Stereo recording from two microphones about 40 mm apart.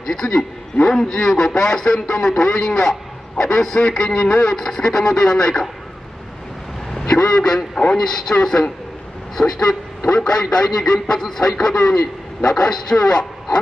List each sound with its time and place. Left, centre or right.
0.0 s a man's voice: centre
6.9 s vehicle: centre
7.9 s a man's voice: centre